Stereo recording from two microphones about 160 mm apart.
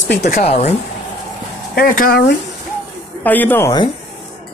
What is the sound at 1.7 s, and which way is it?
Speech, 65° left (ahead or behind).